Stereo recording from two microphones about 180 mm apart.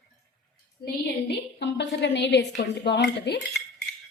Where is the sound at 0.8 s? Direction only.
55° left (ahead or behind).